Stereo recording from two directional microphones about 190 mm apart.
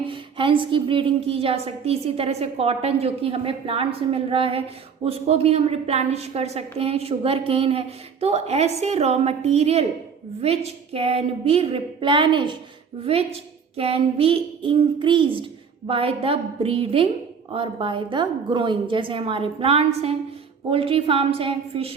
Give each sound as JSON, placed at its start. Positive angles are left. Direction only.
{"t": 0.1, "sound": "a woman's voice", "side_deg": -25}